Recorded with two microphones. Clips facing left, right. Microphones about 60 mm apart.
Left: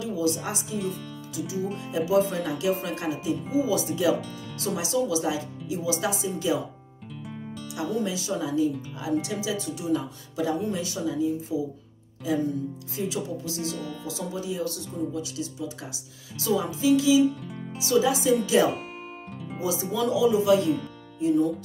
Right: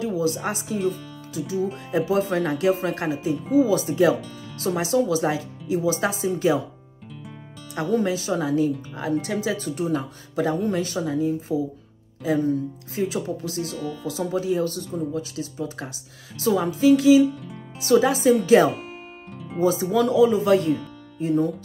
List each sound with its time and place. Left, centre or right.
0.0 s speech: right
1.9 s speech: right
7.7 s speech: right